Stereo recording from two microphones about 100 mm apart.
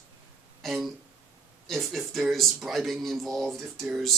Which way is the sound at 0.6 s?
Centre (ahead or behind).